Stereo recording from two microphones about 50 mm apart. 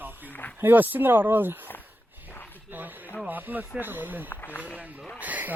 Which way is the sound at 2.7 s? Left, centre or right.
Right.